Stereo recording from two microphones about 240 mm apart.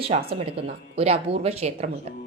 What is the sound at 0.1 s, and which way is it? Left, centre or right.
A woman's voice, right.